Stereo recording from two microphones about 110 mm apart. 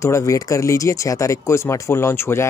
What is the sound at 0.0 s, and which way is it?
Speech, 25° left (ahead or behind).